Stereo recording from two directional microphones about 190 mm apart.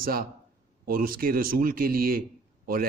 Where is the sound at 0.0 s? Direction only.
50° right (ahead or behind).